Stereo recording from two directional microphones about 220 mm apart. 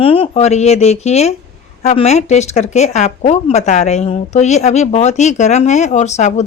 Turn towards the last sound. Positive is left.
turn(degrees=30)  # may be behind; listen again after turning